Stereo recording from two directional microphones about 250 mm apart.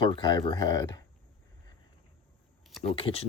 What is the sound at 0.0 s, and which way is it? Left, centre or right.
Speech, centre.